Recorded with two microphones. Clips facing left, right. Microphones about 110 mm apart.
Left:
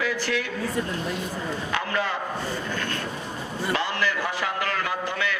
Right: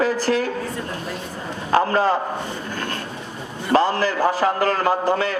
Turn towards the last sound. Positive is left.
turn(degrees=-35)  # may be behind; listen again after turning